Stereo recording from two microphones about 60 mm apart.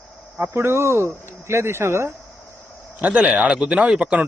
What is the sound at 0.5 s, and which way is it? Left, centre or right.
Speech, right.